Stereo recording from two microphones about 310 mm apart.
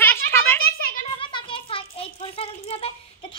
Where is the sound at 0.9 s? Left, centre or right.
Centre.